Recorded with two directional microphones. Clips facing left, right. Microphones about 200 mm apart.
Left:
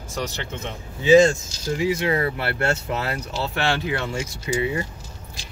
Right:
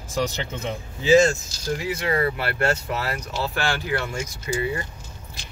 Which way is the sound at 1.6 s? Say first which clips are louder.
Left 3 dB; 25° left (ahead or behind).